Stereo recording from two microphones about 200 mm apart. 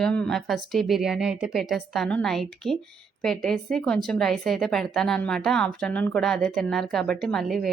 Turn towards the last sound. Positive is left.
turn(degrees=0)  # may be behind; listen again after turning